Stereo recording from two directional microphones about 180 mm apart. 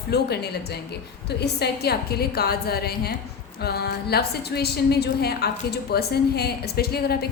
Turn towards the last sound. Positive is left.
turn(degrees=60)  # may be behind; listen again after turning